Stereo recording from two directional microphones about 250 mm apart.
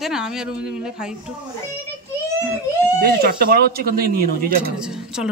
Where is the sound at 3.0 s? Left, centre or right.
Right.